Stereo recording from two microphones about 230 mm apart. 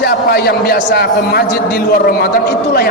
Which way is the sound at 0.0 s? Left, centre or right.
Left.